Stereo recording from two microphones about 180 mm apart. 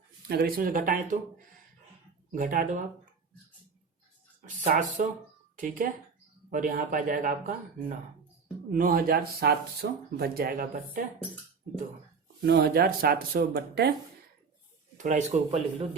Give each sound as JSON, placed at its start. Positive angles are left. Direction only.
{"t": 0.3, "sound": "speech", "side_deg": -60}
{"t": 4.4, "sound": "speech", "side_deg": -45}
{"t": 12.4, "sound": "speech", "side_deg": -60}
{"t": 14.9, "sound": "speech", "side_deg": -45}